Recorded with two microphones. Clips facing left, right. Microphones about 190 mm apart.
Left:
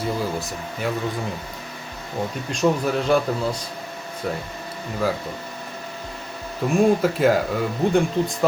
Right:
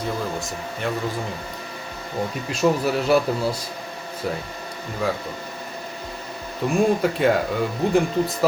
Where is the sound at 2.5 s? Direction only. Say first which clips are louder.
Even; 5° right (ahead or behind).